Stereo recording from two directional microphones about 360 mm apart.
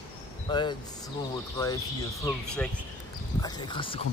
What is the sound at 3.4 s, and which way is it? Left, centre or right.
Speech, centre.